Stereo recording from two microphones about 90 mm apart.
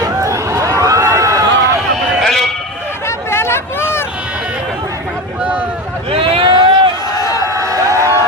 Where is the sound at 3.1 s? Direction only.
30° left (ahead or behind).